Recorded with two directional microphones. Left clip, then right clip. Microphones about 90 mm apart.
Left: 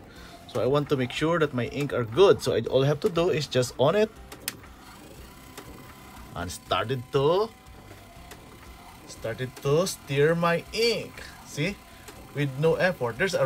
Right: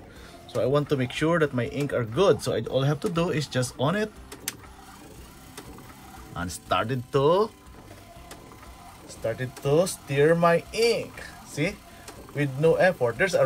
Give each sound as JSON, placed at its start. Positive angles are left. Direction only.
{"t": 0.6, "sound": "speech", "side_deg": 85}
{"t": 3.0, "sound": "speech", "side_deg": 40}
{"t": 6.3, "sound": "speech", "side_deg": 30}
{"t": 9.2, "sound": "speech", "side_deg": 10}
{"t": 9.7, "sound": "speech", "side_deg": 30}
{"t": 10.1, "sound": "speech", "side_deg": 15}